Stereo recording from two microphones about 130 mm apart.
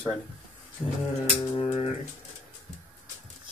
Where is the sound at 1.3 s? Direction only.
45° left (ahead or behind).